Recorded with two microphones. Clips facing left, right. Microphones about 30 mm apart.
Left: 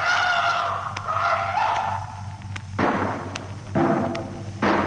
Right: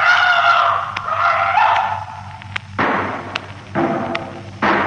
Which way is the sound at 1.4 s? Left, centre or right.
Right.